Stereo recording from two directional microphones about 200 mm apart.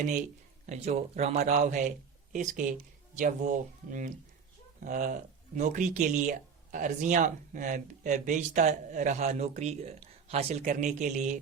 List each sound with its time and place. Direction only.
0.7 s speech: 35° right (ahead or behind)